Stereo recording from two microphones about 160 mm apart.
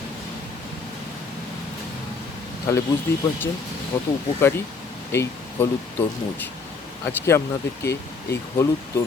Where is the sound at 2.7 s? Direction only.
15° left (ahead or behind).